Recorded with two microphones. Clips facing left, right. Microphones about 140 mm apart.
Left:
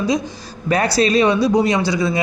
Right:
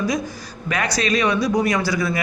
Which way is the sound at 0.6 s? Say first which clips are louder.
Left 6 dB; 35° left (ahead or behind).